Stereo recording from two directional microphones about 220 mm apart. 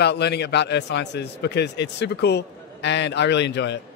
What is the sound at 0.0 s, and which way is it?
A man's voice, 50° left (ahead or behind).